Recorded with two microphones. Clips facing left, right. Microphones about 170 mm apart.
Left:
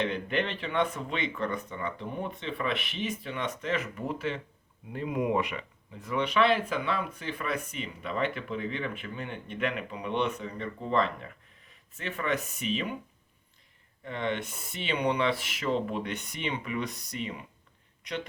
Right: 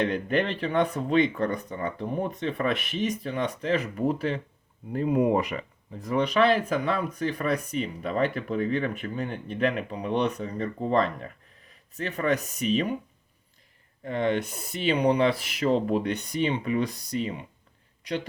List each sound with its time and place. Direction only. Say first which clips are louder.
0.1 s speech: right 5 dB; 40° right (ahead or behind)
14.0 s speech: right 6 dB; 40° right (ahead or behind)